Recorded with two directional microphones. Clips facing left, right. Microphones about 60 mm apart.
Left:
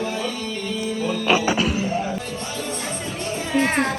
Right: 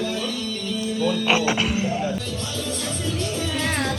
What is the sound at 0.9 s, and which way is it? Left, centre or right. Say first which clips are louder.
Music: even; left.